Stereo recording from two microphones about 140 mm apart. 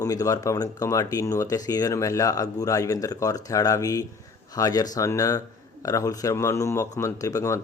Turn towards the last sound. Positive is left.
turn(degrees=25)  # may be behind; listen again after turning